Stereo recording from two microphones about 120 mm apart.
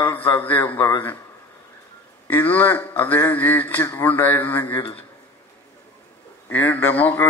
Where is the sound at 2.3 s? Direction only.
15° left (ahead or behind).